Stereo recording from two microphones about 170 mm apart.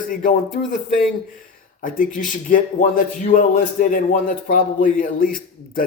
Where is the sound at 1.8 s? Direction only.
55° left (ahead or behind).